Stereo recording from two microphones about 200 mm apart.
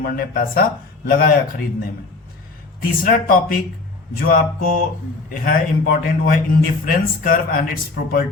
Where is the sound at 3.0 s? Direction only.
45° left (ahead or behind).